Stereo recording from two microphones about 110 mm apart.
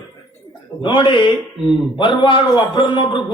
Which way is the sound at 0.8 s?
45° left (ahead or behind).